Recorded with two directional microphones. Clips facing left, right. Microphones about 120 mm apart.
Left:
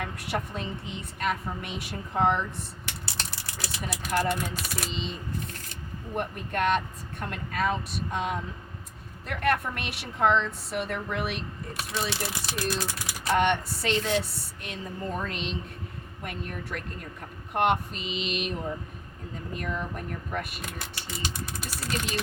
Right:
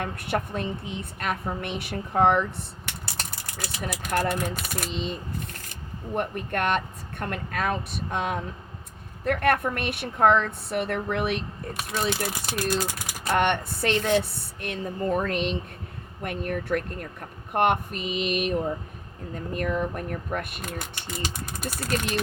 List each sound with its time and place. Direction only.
0.0 s a woman's voice: 55° right (ahead or behind)
6.1 s a woman's voice: 55° right (ahead or behind)
19.5 s speech: 50° right (ahead or behind)